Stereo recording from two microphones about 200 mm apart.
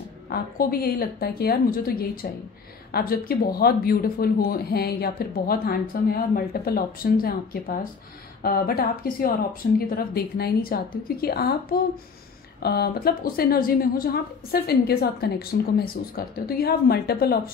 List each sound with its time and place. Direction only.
0.3 s a man's voice: 50° left (ahead or behind)